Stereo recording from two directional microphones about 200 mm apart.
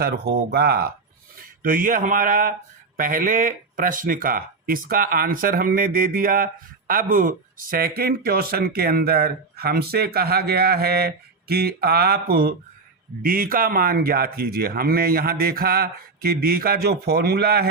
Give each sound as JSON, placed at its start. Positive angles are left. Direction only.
{"t": 0.0, "sound": "speech", "side_deg": -55}